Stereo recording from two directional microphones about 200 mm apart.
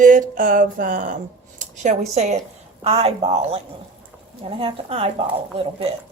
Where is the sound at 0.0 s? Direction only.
40° right (ahead or behind).